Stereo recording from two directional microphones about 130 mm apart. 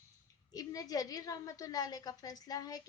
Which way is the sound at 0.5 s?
30° left (ahead or behind).